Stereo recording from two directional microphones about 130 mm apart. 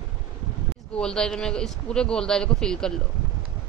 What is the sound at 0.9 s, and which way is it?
A man's voice, 5° left (ahead or behind).